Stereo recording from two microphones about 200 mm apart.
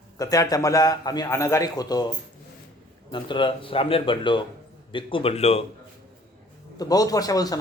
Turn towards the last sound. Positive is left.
turn(degrees=20)  # may be behind; listen again after turning